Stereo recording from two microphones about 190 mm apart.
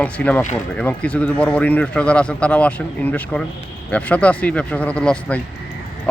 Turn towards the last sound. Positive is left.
turn(degrees=5)  # may be behind; listen again after turning